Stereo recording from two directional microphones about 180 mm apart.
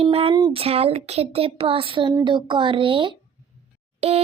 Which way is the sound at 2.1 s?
25° right (ahead or behind).